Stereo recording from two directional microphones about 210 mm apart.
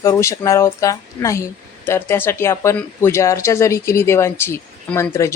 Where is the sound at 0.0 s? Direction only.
15° left (ahead or behind).